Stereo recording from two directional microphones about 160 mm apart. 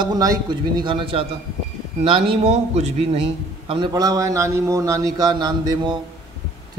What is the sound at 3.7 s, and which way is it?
A man's voice, 25° right (ahead or behind).